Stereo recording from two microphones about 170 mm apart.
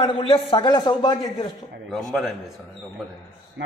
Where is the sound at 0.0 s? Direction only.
30° left (ahead or behind).